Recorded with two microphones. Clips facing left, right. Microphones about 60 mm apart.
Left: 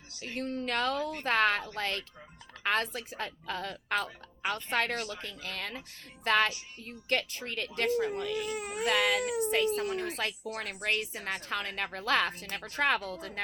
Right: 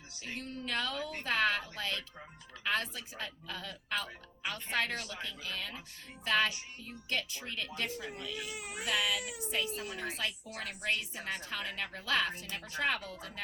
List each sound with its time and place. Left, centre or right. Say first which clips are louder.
0.3 s speech: left 6 dB; left